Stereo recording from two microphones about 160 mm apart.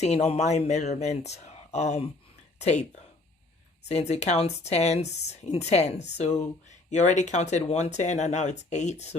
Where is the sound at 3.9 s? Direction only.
40° left (ahead or behind).